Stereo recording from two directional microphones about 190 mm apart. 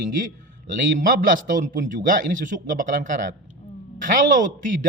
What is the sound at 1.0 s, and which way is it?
Speech, 45° right (ahead or behind).